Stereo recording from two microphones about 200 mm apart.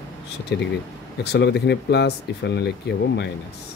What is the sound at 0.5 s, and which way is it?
Speech, 60° left (ahead or behind).